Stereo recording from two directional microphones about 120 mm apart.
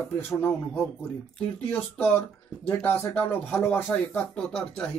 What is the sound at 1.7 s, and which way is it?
Speech, 10° left (ahead or behind).